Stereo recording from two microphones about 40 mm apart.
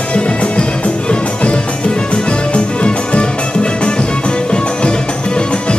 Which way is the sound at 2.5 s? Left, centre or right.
Left.